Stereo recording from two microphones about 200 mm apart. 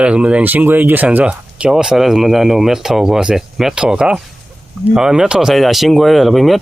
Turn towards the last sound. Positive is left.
turn(degrees=0)  # may be behind; listen again after turning